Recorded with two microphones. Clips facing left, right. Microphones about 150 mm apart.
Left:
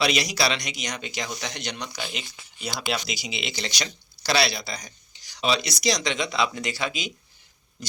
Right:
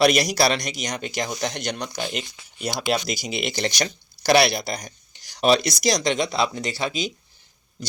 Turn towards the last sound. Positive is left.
turn(degrees=-30)  # may be behind; listen again after turning